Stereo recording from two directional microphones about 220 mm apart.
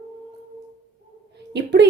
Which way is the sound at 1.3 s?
50° right (ahead or behind).